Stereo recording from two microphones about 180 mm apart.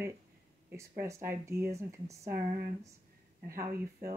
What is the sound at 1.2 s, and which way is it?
Speech, 15° right (ahead or behind).